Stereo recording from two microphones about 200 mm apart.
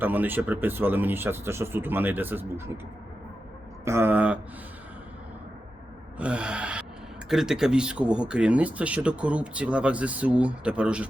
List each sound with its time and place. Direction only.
0.0 s speech: 10° right (ahead or behind)
3.8 s speech: 10° right (ahead or behind)
6.1 s gasp: 5° right (ahead or behind)
7.3 s speech: 5° right (ahead or behind)